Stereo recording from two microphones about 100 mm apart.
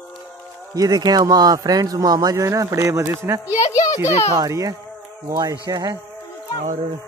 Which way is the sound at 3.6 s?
35° left (ahead or behind).